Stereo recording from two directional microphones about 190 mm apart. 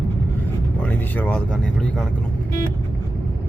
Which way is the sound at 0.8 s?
10° left (ahead or behind).